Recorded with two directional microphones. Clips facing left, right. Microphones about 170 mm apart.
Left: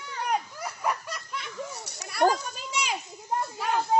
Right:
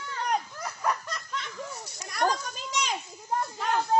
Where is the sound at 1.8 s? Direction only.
70° left (ahead or behind).